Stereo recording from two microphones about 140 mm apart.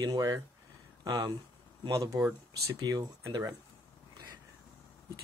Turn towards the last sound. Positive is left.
turn(degrees=-25)  # may be behind; listen again after turning